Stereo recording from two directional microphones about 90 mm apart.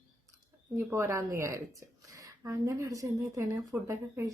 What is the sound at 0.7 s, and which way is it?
A woman's voice, 30° right (ahead or behind).